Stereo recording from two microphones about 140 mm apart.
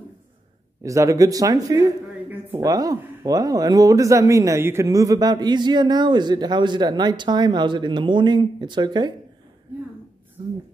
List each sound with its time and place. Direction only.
0.8 s speech: 20° right (ahead or behind)
2.2 s a sound: 20° right (ahead or behind)
3.3 s a man's voice: 25° right (ahead or behind)